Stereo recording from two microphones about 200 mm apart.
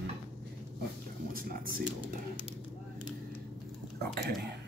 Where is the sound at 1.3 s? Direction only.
45° right (ahead or behind).